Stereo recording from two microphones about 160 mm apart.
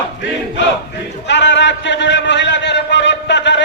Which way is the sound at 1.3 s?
90° left.